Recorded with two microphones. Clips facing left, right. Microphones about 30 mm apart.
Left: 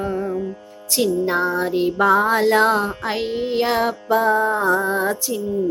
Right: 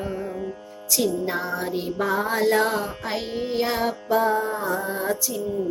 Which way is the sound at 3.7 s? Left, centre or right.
Left.